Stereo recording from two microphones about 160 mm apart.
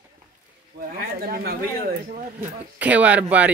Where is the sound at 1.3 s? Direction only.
70° right (ahead or behind).